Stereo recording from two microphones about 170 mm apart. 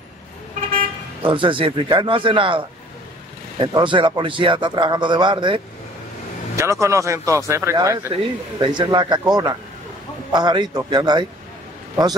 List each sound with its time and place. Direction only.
1.2 s a man's voice: 30° right (ahead or behind)
6.5 s a man's voice: 15° right (ahead or behind)